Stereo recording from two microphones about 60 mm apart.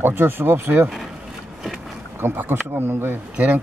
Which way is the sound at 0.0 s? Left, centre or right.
Right.